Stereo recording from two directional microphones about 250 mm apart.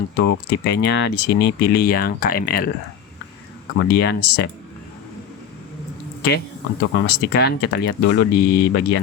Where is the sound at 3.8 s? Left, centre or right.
Left.